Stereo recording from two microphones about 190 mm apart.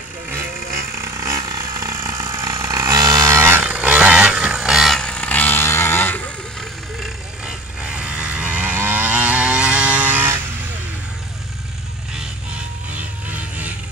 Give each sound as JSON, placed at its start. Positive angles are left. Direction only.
{"t": 0.9, "sound": "chainsaw", "side_deg": -15}
{"t": 7.0, "sound": "vehicle", "side_deg": -5}